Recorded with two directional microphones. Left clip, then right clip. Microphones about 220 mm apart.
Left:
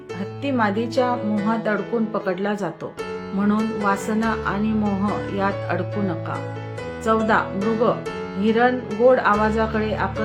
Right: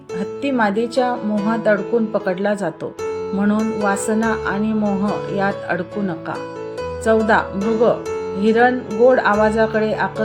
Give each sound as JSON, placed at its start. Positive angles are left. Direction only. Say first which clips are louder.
{"t": 0.4, "sound": "speech", "louder": "right 3 dB", "side_deg": -20}
{"t": 3.8, "sound": "speech", "louder": "right 3 dB", "side_deg": -15}
{"t": 7.0, "sound": "speech", "louder": "right 4 dB", "side_deg": -20}